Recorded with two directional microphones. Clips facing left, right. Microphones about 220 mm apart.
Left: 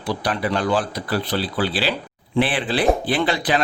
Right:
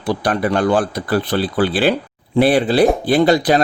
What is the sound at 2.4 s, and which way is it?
Speech, 40° right (ahead or behind).